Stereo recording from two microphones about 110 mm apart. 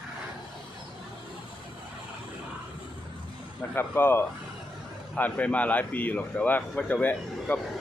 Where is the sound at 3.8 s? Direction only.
20° left (ahead or behind).